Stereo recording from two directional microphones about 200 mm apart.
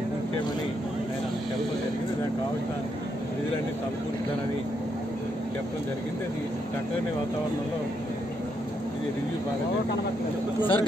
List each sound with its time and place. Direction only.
10.6 s speech: 25° left (ahead or behind)